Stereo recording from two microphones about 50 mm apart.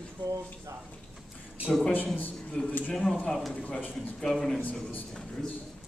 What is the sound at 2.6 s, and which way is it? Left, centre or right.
Speech, centre.